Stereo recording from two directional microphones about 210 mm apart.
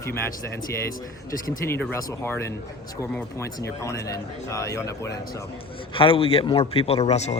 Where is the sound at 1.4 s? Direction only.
10° left (ahead or behind).